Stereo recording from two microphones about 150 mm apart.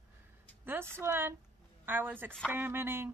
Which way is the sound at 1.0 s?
15° right (ahead or behind).